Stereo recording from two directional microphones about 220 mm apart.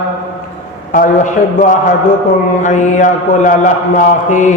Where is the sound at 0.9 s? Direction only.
40° left (ahead or behind).